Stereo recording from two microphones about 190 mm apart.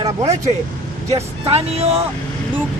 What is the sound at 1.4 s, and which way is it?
Speech, 30° right (ahead or behind).